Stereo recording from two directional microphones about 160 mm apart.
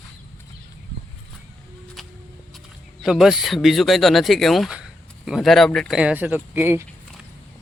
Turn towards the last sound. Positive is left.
turn(degrees=-10)  # may be behind; listen again after turning